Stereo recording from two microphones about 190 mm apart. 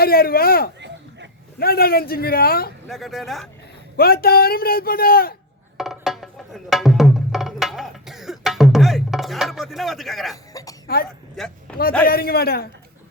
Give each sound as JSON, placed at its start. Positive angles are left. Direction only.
{"t": 0.0, "sound": "a man's voice", "side_deg": 50}
{"t": 2.8, "sound": "speech", "side_deg": 0}
{"t": 3.9, "sound": "a man's voice", "side_deg": 50}
{"t": 5.7, "sound": "music", "side_deg": 0}
{"t": 11.7, "sound": "speech", "side_deg": 5}
{"t": 12.0, "sound": "a man's voice", "side_deg": 55}